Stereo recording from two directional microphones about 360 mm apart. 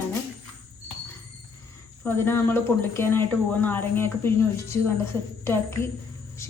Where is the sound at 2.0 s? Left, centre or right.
Centre.